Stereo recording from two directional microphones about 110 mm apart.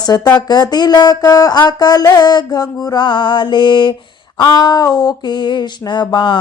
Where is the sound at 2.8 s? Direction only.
40° left (ahead or behind).